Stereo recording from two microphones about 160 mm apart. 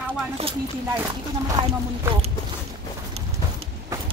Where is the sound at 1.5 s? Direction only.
25° right (ahead or behind).